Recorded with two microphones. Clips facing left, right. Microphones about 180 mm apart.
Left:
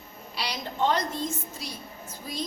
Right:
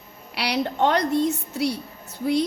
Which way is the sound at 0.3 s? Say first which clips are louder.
Right 7 dB; 65° right (ahead or behind).